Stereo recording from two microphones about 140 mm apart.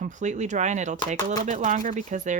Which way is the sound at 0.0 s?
60° right (ahead or behind).